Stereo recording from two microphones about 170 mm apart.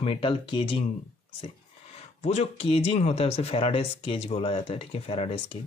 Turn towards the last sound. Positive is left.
turn(degrees=35)  # may be behind; listen again after turning